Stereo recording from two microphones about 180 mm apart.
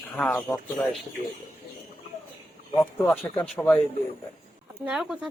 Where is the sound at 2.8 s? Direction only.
5° left (ahead or behind).